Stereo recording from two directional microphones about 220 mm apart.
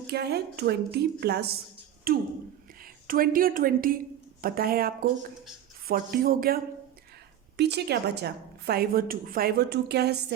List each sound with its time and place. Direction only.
0.1 s a woman's voice: 45° right (ahead or behind)